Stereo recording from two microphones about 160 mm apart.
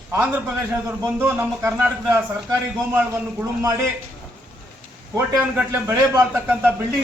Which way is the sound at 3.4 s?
20° right (ahead or behind).